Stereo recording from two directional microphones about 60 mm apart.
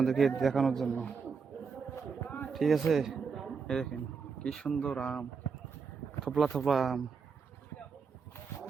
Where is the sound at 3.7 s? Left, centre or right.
Centre.